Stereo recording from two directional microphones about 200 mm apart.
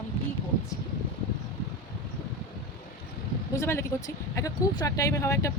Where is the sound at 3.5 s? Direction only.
15° left (ahead or behind).